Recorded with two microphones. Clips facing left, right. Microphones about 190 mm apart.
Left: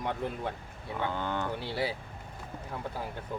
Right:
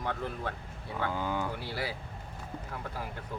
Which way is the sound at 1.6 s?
20° left (ahead or behind).